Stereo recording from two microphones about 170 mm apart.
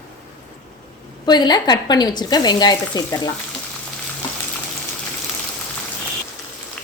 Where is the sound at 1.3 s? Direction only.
25° left (ahead or behind).